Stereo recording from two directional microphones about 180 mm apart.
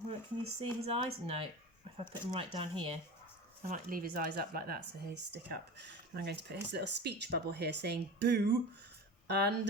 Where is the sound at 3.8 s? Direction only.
55° right (ahead or behind).